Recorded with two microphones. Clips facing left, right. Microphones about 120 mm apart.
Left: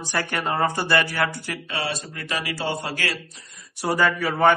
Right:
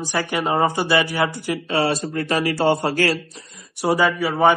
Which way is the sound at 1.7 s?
35° right (ahead or behind).